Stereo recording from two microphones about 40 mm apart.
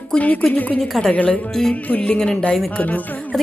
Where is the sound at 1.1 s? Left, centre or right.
Left.